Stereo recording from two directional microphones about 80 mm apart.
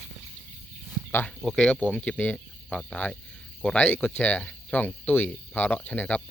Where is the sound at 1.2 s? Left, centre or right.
Centre.